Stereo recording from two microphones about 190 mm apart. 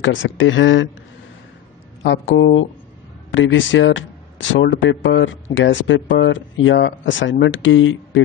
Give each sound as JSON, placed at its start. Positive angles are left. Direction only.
{"t": 0.0, "sound": "speech", "side_deg": 85}
{"t": 2.0, "sound": "speech", "side_deg": 70}
{"t": 3.3, "sound": "speech", "side_deg": 85}